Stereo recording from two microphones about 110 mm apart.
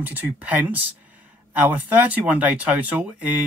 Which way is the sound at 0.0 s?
15° right (ahead or behind).